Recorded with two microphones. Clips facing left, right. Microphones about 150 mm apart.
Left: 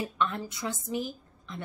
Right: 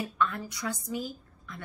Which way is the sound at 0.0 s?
25° left (ahead or behind).